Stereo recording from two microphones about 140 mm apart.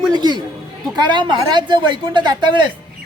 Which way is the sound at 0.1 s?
30° right (ahead or behind).